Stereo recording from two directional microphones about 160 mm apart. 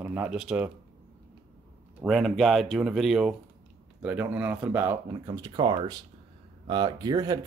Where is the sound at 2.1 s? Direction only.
Centre (ahead or behind).